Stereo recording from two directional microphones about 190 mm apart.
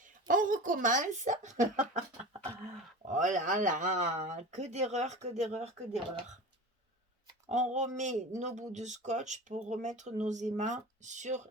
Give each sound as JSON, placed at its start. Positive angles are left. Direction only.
{"t": 0.0, "sound": "speech", "side_deg": -45}
{"t": 3.1, "sound": "speech", "side_deg": -40}
{"t": 7.4, "sound": "speech", "side_deg": -35}